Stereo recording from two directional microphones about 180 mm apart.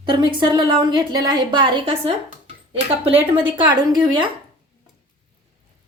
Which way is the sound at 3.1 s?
25° right (ahead or behind).